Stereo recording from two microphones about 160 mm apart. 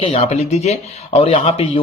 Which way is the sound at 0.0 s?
40° left (ahead or behind).